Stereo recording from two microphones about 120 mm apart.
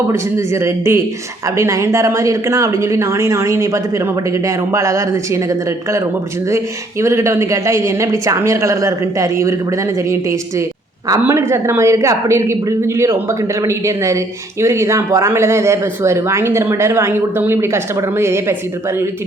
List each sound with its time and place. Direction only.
0.1 s speech: 25° right (ahead or behind)
7.0 s speech: 25° right (ahead or behind)